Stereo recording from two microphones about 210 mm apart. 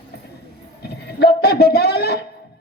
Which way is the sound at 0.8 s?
50° left (ahead or behind).